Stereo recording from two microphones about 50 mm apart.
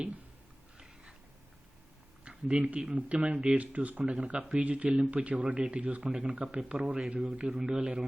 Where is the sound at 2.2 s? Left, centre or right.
Right.